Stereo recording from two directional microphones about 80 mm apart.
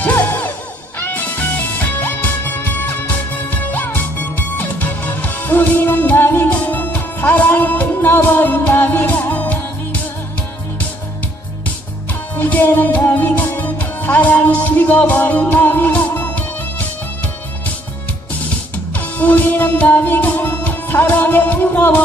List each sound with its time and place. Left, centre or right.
0.0 s music: left
12.4 s music: left
18.9 s music: left